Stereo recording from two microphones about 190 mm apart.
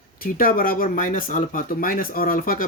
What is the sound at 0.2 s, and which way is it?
Speech, 50° left (ahead or behind).